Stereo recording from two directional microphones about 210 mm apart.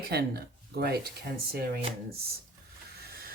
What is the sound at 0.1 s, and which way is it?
Speech, 50° right (ahead or behind).